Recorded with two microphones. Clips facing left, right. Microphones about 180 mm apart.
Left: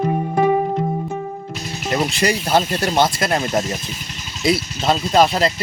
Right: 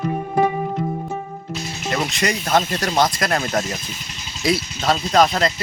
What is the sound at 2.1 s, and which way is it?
Speech, 30° left (ahead or behind).